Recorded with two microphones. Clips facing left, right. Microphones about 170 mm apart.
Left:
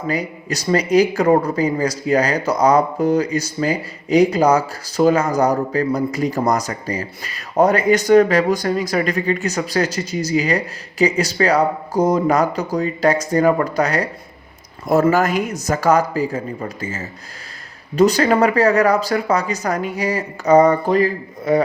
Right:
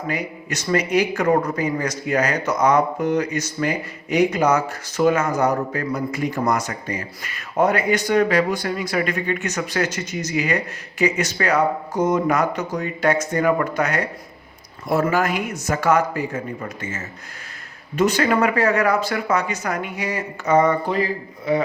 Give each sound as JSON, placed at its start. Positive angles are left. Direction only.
{"t": 0.1, "sound": "speech", "side_deg": 35}
{"t": 15.1, "sound": "speech", "side_deg": 40}